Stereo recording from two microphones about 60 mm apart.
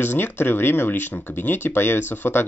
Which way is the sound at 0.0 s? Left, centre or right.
Left.